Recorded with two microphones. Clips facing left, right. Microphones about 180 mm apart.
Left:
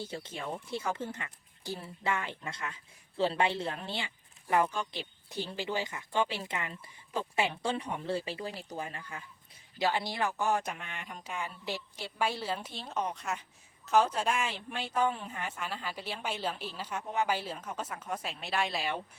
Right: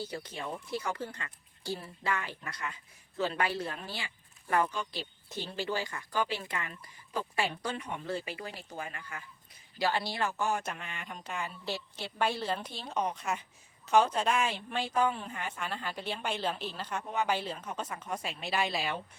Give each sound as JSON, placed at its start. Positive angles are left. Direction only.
{"t": 0.0, "sound": "speech", "side_deg": 25}
{"t": 10.8, "sound": "speech", "side_deg": 5}